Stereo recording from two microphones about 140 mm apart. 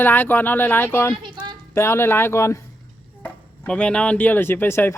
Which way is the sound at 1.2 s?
35° right (ahead or behind).